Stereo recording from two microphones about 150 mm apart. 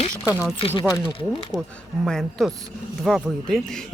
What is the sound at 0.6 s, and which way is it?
Speech, 35° left (ahead or behind).